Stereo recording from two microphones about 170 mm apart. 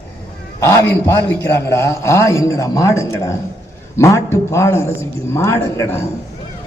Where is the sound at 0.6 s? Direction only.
15° left (ahead or behind).